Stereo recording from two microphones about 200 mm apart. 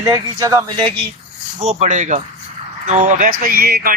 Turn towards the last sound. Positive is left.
turn(degrees=-50)  # may be behind; listen again after turning